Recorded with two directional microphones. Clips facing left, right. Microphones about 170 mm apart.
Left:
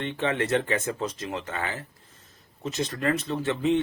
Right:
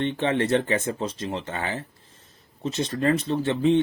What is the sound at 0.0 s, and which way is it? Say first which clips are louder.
Speech: right 4 dB; 30° right (ahead or behind).